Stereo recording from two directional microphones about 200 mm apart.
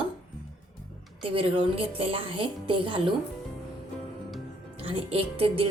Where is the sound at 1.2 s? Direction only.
25° right (ahead or behind).